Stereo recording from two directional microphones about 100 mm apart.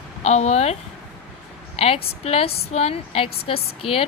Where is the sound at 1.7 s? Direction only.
75° left (ahead or behind).